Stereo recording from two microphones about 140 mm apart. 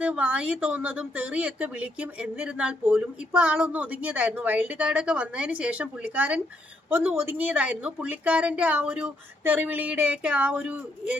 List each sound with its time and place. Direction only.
0.0 s a woman's voice: 10° right (ahead or behind)